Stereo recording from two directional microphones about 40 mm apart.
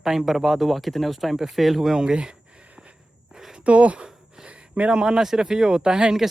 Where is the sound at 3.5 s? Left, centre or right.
Right.